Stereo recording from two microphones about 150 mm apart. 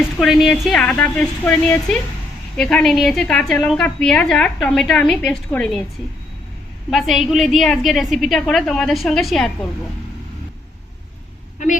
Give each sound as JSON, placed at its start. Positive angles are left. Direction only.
{"t": 0.2, "sound": "a woman's voice", "side_deg": 0}
{"t": 6.9, "sound": "a woman's voice", "side_deg": 0}
{"t": 11.6, "sound": "a woman's voice", "side_deg": 55}